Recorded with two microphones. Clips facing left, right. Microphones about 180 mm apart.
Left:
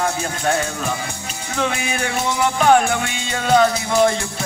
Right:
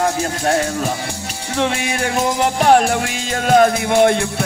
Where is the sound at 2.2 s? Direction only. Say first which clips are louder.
Right 1 dB; 40° right (ahead or behind).